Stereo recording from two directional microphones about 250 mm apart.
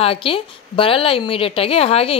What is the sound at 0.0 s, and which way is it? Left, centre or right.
A woman's voice, left.